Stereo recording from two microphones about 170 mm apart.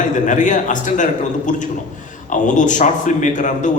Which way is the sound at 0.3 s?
50° left (ahead or behind).